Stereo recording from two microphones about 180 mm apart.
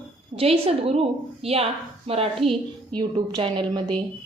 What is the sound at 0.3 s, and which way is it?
A woman's voice, 30° right (ahead or behind).